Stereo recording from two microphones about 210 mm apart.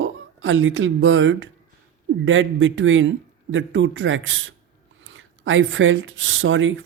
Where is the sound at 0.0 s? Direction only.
70° right (ahead or behind).